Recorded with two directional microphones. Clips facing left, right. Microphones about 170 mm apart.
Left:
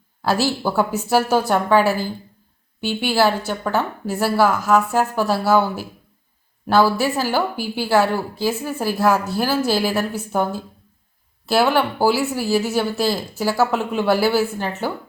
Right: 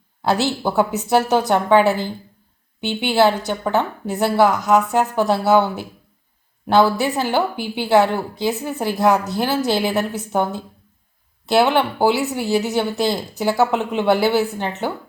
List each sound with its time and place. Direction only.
0.2 s a woman's voice: 20° right (ahead or behind)